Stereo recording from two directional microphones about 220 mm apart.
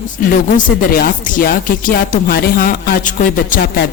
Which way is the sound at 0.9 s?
40° left (ahead or behind).